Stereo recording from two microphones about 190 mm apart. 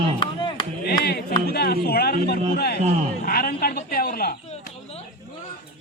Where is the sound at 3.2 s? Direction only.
50° left (ahead or behind).